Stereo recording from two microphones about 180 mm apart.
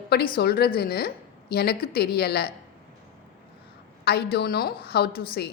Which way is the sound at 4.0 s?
60° left (ahead or behind).